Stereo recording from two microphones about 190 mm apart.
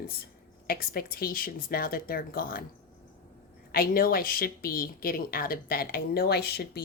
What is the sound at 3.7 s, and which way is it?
A woman's voice, 50° left (ahead or behind).